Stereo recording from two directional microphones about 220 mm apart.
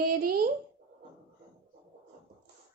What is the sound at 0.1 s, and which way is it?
Speech, 40° right (ahead or behind).